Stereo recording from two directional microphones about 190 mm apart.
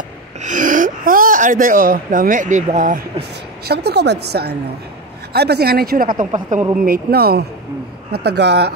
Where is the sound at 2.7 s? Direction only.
40° right (ahead or behind).